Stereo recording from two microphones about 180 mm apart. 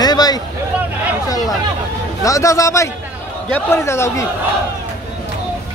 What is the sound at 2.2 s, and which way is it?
A man's voice, 15° left (ahead or behind).